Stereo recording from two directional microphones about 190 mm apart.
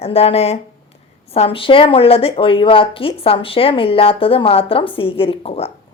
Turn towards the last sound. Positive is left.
turn(degrees=30)  # may be behind; listen again after turning